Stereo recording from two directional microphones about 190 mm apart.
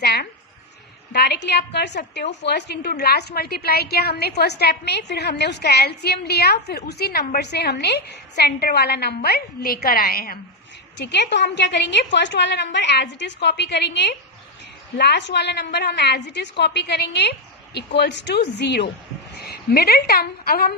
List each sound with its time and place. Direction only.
0.0 s a sound: 55° left (ahead or behind)
1.1 s a woman's voice: 60° left (ahead or behind)
10.9 s a woman's voice: 65° left (ahead or behind)